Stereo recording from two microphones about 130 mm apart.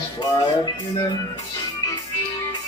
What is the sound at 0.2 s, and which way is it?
Music, 35° left (ahead or behind).